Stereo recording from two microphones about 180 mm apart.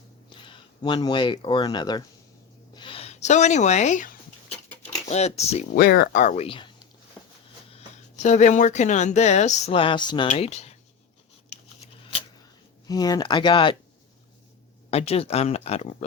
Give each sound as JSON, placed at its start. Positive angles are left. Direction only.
{"t": 0.3, "sound": "speech", "side_deg": 25}
{"t": 2.7, "sound": "a sound", "side_deg": 30}
{"t": 5.0, "sound": "speech", "side_deg": 35}
{"t": 5.7, "sound": "speech", "side_deg": 60}
{"t": 6.2, "sound": "speech", "side_deg": 35}
{"t": 8.2, "sound": "speech", "side_deg": 40}
{"t": 12.9, "sound": "speech", "side_deg": 20}
{"t": 14.8, "sound": "speech", "side_deg": 35}